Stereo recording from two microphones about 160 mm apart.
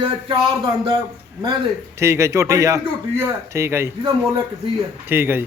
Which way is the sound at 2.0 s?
15° right (ahead or behind).